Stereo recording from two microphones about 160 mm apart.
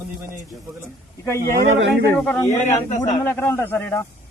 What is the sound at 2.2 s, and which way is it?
A man's voice, 5° left (ahead or behind).